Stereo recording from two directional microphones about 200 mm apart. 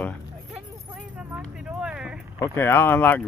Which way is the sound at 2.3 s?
10° left (ahead or behind).